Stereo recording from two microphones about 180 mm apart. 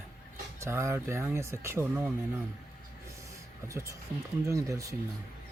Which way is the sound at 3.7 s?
15° right (ahead or behind).